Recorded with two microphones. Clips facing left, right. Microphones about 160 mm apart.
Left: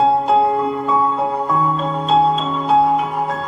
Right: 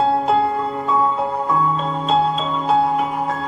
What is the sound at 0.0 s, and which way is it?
Music, centre (ahead or behind).